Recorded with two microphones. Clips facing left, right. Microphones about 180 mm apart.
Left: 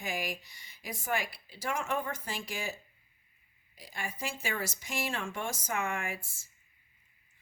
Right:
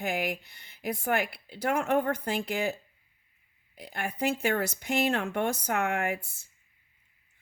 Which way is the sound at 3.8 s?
60° right (ahead or behind).